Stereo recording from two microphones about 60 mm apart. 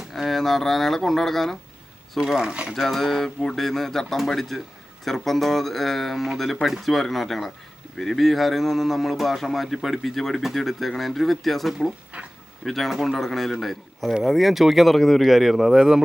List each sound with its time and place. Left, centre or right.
0.1 s speech: centre
2.2 s speech: centre
2.7 s a man's voice: centre
12.1 s speech: centre
12.6 s a man's voice: centre